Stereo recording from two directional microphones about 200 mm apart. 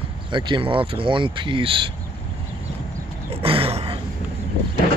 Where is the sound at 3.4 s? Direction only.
30° right (ahead or behind).